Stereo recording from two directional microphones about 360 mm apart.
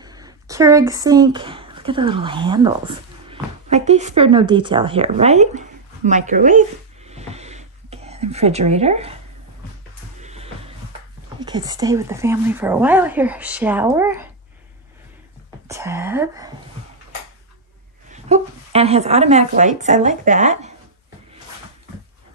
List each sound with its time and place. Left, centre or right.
0.0 s speech: centre
7.1 s a sound: centre
10.2 s music: centre
11.3 s a woman's voice: centre
15.7 s speech: centre
18.1 s a woman's voice: centre